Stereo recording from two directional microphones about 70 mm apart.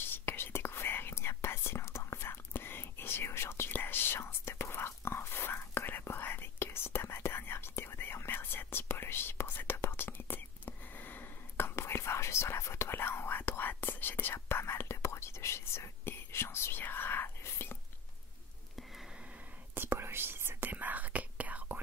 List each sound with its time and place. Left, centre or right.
0.0 s whispering: left
19.7 s whispering: right